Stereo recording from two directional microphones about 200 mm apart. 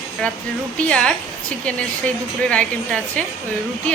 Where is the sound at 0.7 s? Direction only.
5° left (ahead or behind).